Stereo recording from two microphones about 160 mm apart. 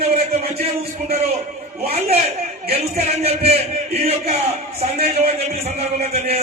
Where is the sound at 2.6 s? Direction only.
40° right (ahead or behind).